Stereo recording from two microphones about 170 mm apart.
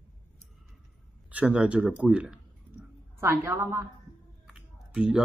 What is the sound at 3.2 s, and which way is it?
Speech, 20° right (ahead or behind).